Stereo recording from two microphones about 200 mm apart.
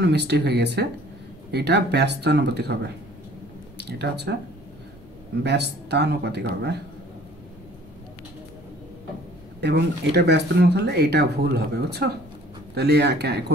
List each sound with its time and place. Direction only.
0.0 s speech: 55° right (ahead or behind)
5.4 s speech: 55° right (ahead or behind)
9.6 s speech: 55° right (ahead or behind)